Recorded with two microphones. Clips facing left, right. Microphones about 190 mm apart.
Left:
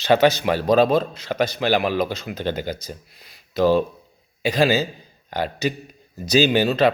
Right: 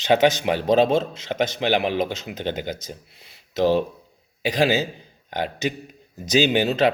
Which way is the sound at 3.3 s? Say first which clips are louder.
Left 2 dB; 20° right (ahead or behind).